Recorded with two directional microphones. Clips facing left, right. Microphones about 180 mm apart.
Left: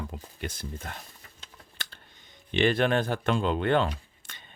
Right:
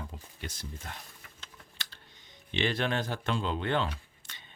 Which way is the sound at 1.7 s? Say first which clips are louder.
Left 6 dB; 55° left (ahead or behind).